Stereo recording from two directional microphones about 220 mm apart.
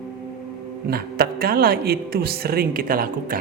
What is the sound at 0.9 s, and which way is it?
Speech, 45° right (ahead or behind).